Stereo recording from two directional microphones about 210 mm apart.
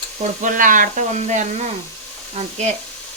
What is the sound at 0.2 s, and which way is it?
Speech, 40° right (ahead or behind).